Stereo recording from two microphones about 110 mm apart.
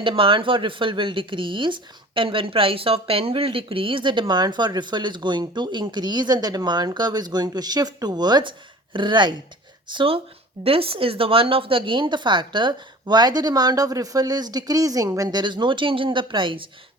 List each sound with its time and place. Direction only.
0.0 s speech: 50° right (ahead or behind)